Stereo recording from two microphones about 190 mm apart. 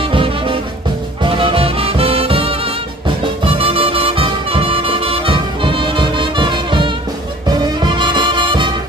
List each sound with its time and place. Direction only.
0.0 s music: 25° right (ahead or behind)